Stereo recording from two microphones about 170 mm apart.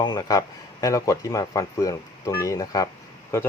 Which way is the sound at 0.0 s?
25° left (ahead or behind).